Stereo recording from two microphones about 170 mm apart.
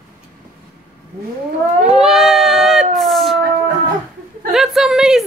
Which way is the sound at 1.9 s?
Centre (ahead or behind).